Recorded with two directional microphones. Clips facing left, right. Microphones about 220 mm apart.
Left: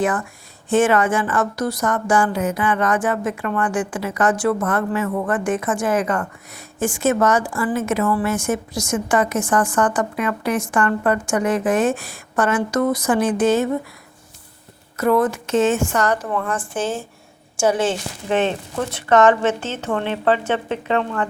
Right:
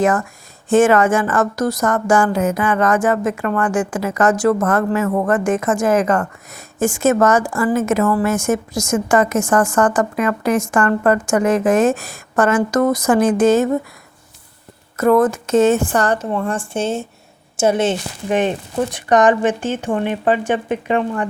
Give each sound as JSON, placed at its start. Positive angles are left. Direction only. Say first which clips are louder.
{"t": 0.0, "sound": "a woman's voice", "louder": "right 4 dB", "side_deg": -45}
{"t": 14.9, "sound": "a woman's voice", "louder": "right 4 dB", "side_deg": -50}